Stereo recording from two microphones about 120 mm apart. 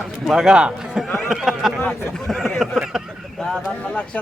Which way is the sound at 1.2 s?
Centre (ahead or behind).